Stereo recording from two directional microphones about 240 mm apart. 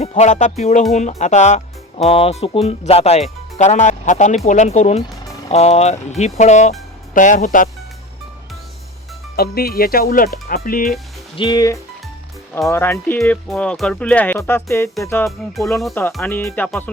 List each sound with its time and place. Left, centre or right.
0.0 s speech: left
9.3 s speech: left
11.3 s speech: centre
15.5 s speech: centre